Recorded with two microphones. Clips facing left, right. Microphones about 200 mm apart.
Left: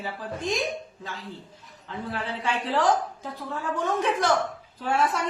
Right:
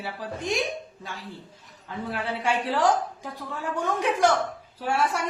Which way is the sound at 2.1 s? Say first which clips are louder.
Right 3 dB; 10° right (ahead or behind).